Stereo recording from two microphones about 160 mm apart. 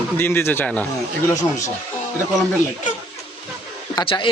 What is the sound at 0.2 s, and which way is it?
A man's voice, 15° left (ahead or behind).